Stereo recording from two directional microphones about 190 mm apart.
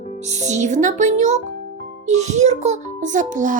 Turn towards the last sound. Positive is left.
turn(degrees=-40)  # may be behind; listen again after turning